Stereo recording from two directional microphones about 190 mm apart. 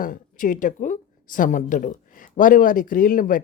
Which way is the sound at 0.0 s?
45° left (ahead or behind).